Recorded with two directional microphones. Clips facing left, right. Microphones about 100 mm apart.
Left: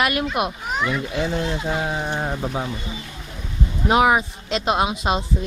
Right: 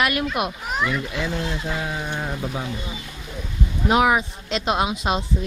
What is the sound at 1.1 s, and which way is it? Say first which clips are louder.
Speech: left 3 dB; 40° left (ahead or behind).